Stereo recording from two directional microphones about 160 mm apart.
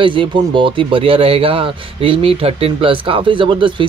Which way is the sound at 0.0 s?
30° right (ahead or behind).